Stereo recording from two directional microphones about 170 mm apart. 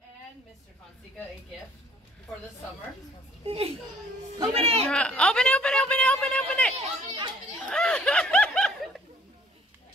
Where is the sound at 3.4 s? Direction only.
35° right (ahead or behind).